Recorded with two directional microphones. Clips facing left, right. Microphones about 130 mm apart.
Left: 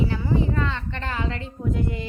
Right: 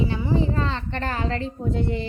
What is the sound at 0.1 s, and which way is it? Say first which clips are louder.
Speech: right 1 dB; 25° right (ahead or behind).